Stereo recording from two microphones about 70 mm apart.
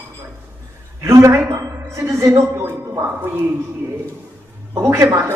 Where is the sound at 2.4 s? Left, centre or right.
Right.